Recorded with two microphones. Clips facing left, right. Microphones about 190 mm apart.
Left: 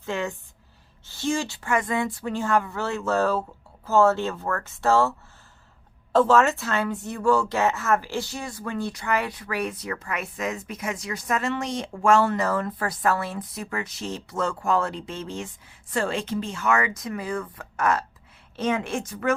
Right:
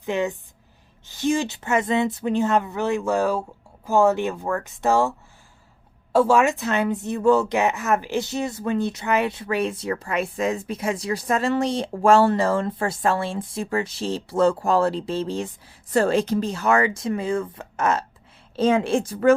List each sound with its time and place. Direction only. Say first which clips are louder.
0.0 s speech: right 5 dB; 20° right (ahead or behind)
6.1 s a woman's voice: right 1 dB; 10° right (ahead or behind); by 19.3 s 35° right (ahead or behind)